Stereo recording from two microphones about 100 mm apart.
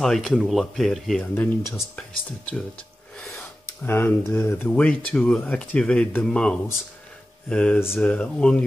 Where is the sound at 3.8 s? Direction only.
20° left (ahead or behind).